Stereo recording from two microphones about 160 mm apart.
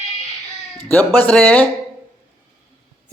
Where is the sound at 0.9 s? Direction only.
10° left (ahead or behind).